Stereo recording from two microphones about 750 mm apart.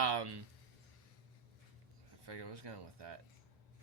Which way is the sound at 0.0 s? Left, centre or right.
Right.